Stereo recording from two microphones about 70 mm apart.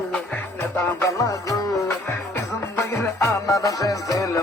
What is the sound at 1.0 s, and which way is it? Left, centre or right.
Music, left.